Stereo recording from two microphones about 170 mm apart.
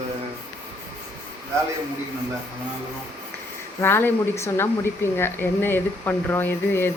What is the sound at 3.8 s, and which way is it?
Speech, 10° left (ahead or behind).